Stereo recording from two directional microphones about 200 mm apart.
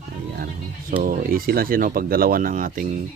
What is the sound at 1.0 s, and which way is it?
Speech, 45° right (ahead or behind).